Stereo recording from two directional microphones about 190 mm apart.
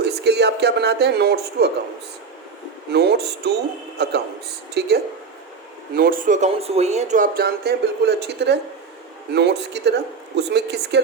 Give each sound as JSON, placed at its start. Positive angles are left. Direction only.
{"t": 0.0, "sound": "speech", "side_deg": -60}
{"t": 2.9, "sound": "a man's voice", "side_deg": -60}
{"t": 6.0, "sound": "speech", "side_deg": -50}